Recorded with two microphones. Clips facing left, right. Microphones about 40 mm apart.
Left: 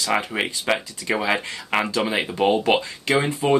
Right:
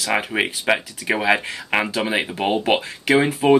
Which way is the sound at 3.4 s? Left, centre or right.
Centre.